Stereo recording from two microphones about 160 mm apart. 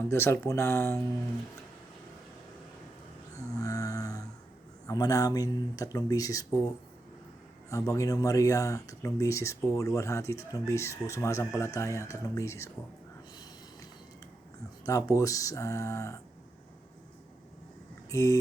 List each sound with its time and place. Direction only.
0.1 s speech: 15° left (ahead or behind)
3.6 s a sound: 20° left (ahead or behind)
4.9 s speech: 25° left (ahead or behind)
7.7 s speech: 20° left (ahead or behind)
14.8 s speech: 20° left (ahead or behind)
18.1 s speech: 20° left (ahead or behind)